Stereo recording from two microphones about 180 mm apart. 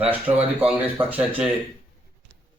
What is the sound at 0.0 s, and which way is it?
A man's voice, 10° right (ahead or behind).